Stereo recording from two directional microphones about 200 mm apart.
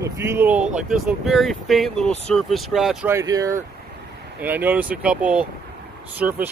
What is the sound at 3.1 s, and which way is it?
Speech, 15° right (ahead or behind).